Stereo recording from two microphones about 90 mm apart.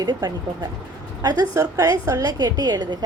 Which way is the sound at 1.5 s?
40° right (ahead or behind).